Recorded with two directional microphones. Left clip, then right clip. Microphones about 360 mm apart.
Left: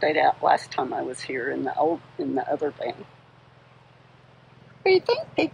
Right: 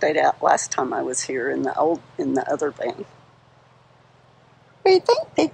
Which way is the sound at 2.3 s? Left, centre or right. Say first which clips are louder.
Right 3 dB; centre.